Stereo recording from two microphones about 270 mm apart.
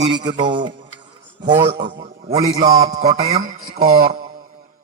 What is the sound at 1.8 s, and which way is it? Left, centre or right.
Speech, right.